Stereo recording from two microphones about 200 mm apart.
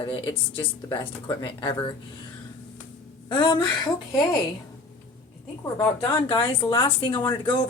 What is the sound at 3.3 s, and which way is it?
Speech, 25° left (ahead or behind).